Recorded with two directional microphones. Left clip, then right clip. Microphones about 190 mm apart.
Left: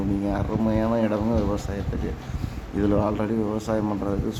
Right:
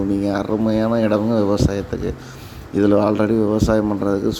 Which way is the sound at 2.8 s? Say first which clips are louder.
Right 8 dB; 30° right (ahead or behind).